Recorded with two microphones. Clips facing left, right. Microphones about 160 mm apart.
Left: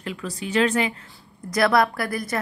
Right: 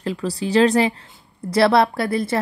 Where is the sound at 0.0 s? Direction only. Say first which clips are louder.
Right 7 dB; 35° right (ahead or behind).